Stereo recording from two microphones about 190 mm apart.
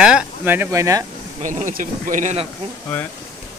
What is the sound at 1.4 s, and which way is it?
Speech, 40° right (ahead or behind).